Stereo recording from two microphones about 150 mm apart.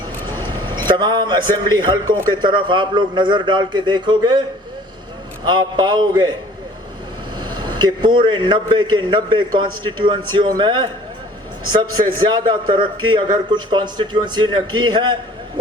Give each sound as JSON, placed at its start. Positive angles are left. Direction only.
{"t": 0.9, "sound": "a man's voice", "side_deg": -30}
{"t": 5.5, "sound": "a man's voice", "side_deg": -30}
{"t": 7.3, "sound": "a man's voice", "side_deg": -30}
{"t": 12.3, "sound": "a man's voice", "side_deg": -35}